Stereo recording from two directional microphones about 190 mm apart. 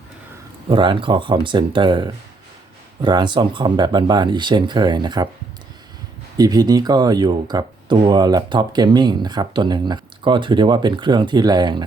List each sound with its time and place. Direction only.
0.7 s speech: 25° right (ahead or behind)
6.3 s speech: 20° right (ahead or behind)